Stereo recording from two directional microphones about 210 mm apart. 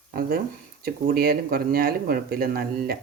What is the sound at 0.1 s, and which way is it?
Speech, 45° right (ahead or behind).